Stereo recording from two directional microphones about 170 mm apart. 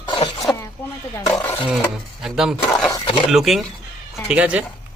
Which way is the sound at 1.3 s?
10° left (ahead or behind).